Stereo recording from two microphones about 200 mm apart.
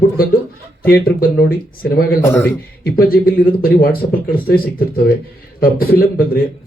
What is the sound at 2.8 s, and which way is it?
A man's voice, 45° left (ahead or behind).